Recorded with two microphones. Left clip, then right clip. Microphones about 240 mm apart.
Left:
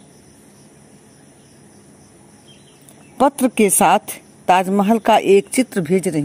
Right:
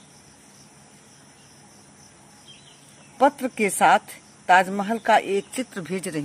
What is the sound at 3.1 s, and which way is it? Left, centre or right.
Speech, left.